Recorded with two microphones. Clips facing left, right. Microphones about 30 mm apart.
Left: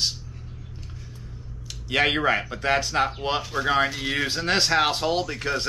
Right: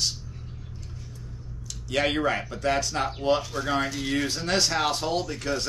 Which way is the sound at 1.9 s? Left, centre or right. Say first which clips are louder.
Left 3 dB; left.